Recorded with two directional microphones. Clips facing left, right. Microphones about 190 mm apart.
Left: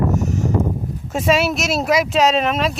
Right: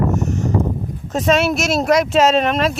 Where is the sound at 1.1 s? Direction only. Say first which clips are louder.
Right 1 dB; 5° left (ahead or behind).